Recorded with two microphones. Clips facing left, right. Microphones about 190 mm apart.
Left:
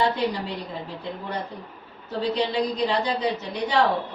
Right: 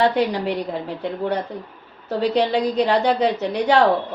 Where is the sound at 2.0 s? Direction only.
70° right (ahead or behind).